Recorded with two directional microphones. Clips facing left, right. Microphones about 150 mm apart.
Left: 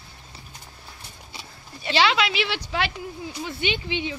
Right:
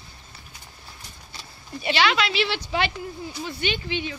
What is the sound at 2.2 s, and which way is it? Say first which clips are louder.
Speech: even; 10° left (ahead or behind).